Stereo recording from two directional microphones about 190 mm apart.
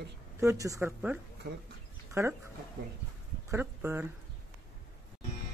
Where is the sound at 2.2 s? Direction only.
15° right (ahead or behind).